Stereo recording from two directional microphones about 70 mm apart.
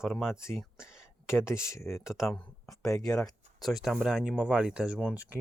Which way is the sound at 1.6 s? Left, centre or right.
Left.